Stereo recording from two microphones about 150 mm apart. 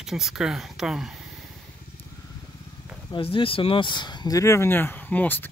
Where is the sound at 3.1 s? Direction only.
35° left (ahead or behind).